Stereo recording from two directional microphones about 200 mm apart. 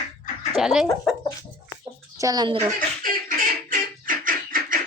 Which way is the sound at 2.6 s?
45° right (ahead or behind).